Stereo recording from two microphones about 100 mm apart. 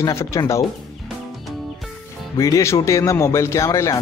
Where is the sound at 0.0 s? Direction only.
30° left (ahead or behind).